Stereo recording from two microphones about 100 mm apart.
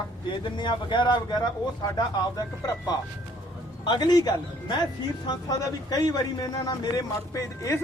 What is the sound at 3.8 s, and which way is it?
A man's voice, 45° left (ahead or behind).